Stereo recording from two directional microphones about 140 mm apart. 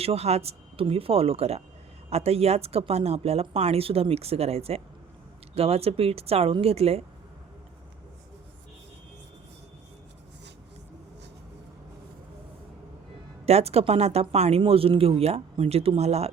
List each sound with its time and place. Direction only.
0.0 s speech: 45° right (ahead or behind)
13.4 s speech: 50° right (ahead or behind)